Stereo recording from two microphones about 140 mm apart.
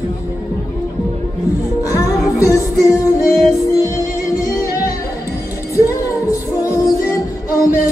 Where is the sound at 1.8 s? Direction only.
25° left (ahead or behind).